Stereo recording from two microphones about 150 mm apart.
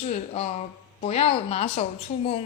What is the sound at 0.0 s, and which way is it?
A woman's voice, 45° left (ahead or behind).